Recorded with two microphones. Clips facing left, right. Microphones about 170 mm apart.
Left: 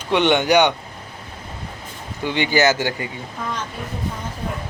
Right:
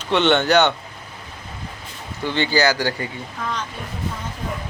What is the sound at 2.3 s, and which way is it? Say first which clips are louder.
Speech: left 1 dB; 15° left (ahead or behind).